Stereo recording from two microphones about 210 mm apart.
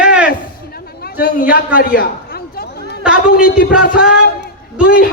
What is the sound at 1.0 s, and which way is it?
Speech, 45° left (ahead or behind).